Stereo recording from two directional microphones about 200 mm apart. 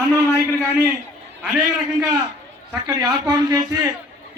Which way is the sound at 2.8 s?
20° right (ahead or behind).